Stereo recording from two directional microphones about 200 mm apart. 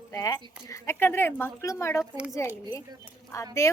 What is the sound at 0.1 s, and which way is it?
A woman's voice, 20° left (ahead or behind).